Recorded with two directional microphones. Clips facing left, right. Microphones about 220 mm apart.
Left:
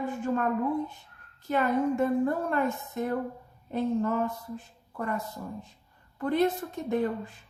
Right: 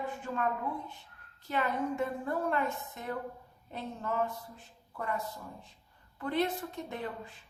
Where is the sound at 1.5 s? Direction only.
45° left (ahead or behind).